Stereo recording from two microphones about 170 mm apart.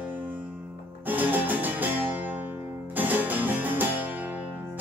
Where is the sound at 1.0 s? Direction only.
10° right (ahead or behind).